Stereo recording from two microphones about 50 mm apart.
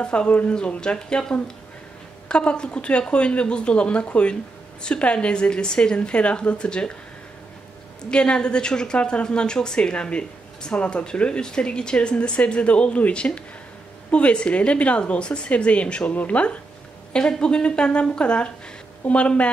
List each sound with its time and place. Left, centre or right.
0.0 s a woman's voice: left
2.2 s a woman's voice: centre
8.1 s a woman's voice: centre
17.1 s a woman's voice: centre